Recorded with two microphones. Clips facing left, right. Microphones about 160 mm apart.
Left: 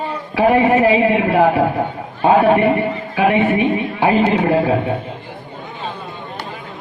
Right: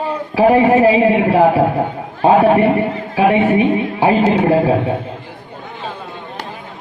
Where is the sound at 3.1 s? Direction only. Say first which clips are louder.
Right 2 dB; 30° right (ahead or behind).